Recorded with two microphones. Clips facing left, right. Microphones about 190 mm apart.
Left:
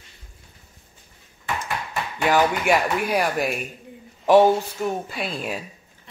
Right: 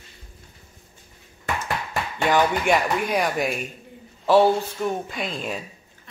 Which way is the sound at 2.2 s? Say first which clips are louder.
Left 1 dB; 5° left (ahead or behind).